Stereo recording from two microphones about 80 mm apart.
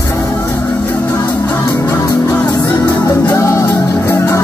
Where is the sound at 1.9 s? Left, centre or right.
Left.